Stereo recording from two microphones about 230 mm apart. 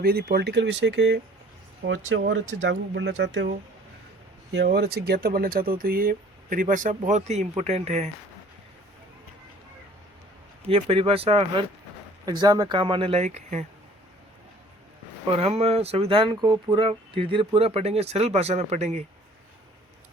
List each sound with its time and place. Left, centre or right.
0.0 s speech: right
4.5 s speech: right
10.7 s speech: right
15.3 s speech: right